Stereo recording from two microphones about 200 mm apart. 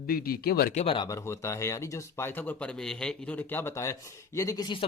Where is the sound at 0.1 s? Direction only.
50° left (ahead or behind).